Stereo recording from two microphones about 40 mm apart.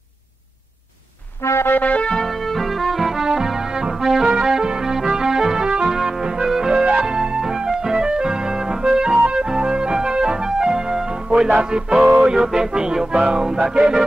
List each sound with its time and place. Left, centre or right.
1.4 s music: left
1.8 s music: left
2.2 s music: centre; by 5.9 s right
5.9 s music: centre
6.8 s music: right